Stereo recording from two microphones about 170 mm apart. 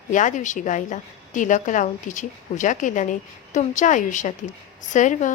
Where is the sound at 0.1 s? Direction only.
45° left (ahead or behind).